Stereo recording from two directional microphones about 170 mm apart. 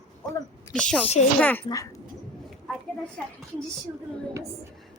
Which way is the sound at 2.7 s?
5° left (ahead or behind).